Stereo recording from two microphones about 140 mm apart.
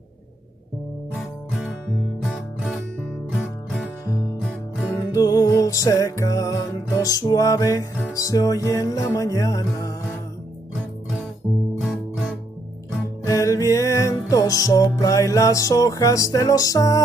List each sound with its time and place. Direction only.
1.1 s music: centre (ahead or behind)
4.0 s music: 25° left (ahead or behind)
4.4 s music: centre (ahead or behind)
5.1 s music: 25° left (ahead or behind)
11.8 s music: centre (ahead or behind)
13.2 s music: 25° left (ahead or behind)